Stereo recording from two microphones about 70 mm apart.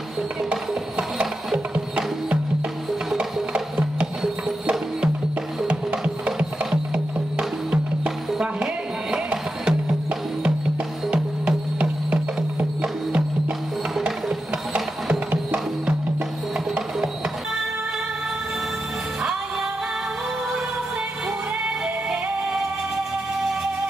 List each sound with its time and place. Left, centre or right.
0.5 s music: centre
3.3 s music: centre
11.1 s music: centre
14.7 s music: centre